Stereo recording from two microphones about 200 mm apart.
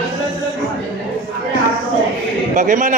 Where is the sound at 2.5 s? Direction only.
40° right (ahead or behind).